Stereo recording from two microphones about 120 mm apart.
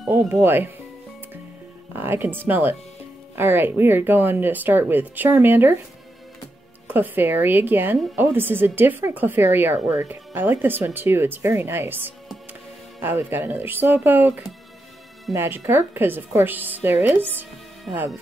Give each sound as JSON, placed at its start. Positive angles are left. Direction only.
{"t": 0.1, "sound": "speech", "side_deg": -20}
{"t": 2.0, "sound": "speech", "side_deg": -15}
{"t": 6.9, "sound": "speech", "side_deg": -15}
{"t": 15.3, "sound": "speech", "side_deg": -20}